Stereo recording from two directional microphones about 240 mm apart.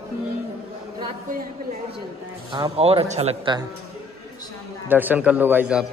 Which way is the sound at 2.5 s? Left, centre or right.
Right.